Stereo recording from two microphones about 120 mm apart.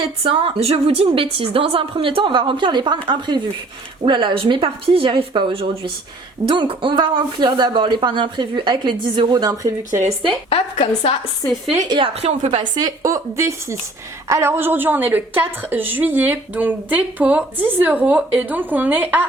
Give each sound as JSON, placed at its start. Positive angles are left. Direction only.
{"t": 0.2, "sound": "a woman's voice", "side_deg": -50}
{"t": 10.5, "sound": "a woman's voice", "side_deg": 50}
{"t": 11.9, "sound": "a woman's voice", "side_deg": -45}
{"t": 12.5, "sound": "a woman's voice", "side_deg": -35}